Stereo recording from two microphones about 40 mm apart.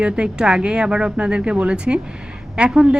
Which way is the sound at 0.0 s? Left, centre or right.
Right.